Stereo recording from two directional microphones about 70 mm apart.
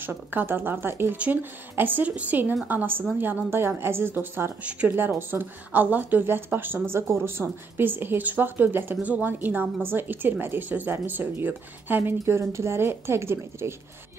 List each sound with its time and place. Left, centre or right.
0.0 s speech: right
1.1 s a woman's voice: right
4.6 s speech: centre
4.9 s speech: right